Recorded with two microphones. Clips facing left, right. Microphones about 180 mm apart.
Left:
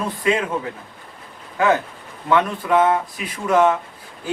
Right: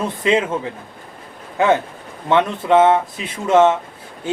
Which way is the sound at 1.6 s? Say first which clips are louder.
Right 2 dB; 25° right (ahead or behind).